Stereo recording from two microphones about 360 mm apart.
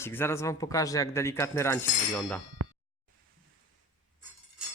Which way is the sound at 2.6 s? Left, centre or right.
Right.